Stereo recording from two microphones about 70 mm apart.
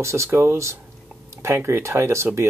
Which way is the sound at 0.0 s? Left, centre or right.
Right.